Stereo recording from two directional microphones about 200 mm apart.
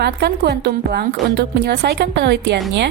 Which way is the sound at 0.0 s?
55° right (ahead or behind).